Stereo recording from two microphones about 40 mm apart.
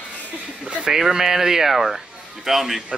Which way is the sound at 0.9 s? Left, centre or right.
Centre.